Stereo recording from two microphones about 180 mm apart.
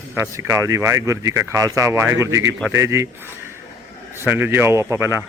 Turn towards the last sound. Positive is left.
turn(degrees=-15)  # may be behind; listen again after turning